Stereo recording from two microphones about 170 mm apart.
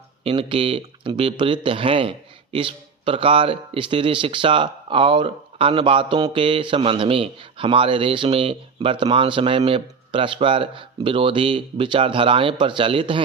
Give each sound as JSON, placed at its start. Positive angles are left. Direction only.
{"t": 0.3, "sound": "speech", "side_deg": -30}